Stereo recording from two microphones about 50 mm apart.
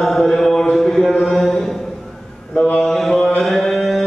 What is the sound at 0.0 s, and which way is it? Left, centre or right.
Chant, centre.